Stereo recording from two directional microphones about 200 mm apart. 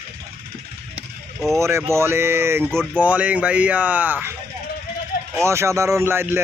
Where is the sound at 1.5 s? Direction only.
15° right (ahead or behind).